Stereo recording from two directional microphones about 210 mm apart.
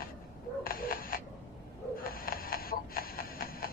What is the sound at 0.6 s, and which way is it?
Cat, 45° left (ahead or behind).